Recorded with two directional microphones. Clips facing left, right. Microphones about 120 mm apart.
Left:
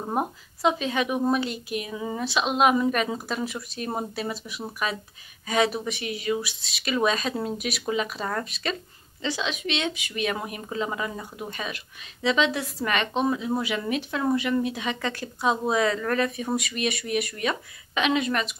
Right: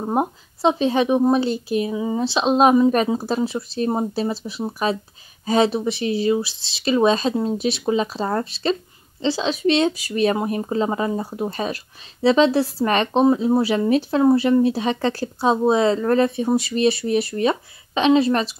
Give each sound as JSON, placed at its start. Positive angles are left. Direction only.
{"t": 0.0, "sound": "speech", "side_deg": -25}